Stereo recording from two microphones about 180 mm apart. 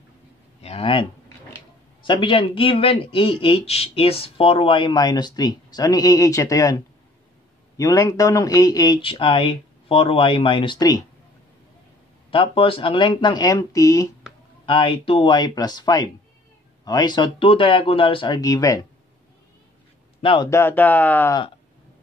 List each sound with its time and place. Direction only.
0.6 s a sound: 35° left (ahead or behind)
2.0 s speech: 30° left (ahead or behind)
12.3 s speech: 30° left (ahead or behind)
14.7 s speech: 30° left (ahead or behind)
20.2 s speech: 30° left (ahead or behind)
20.4 s speech: 15° left (ahead or behind)